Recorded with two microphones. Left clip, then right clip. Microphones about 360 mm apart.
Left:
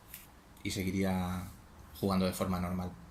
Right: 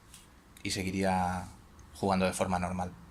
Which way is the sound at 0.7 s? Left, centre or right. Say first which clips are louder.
Right 2 dB; right.